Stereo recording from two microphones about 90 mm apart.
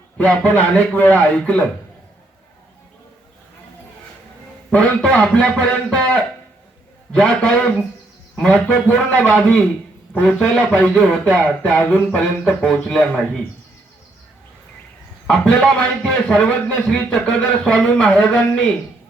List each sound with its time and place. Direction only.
0.2 s a man's voice: 15° left (ahead or behind)
4.7 s a man's voice: 10° left (ahead or behind)
11.8 s speech: 20° left (ahead or behind)
12.1 s a man's voice: 10° left (ahead or behind)
15.5 s a man's voice: 5° left (ahead or behind)